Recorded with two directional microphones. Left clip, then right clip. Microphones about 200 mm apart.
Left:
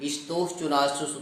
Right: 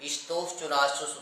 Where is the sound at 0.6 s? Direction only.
Centre (ahead or behind).